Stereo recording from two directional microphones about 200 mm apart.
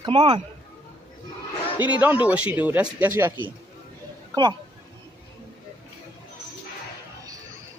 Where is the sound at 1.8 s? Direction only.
5° right (ahead or behind).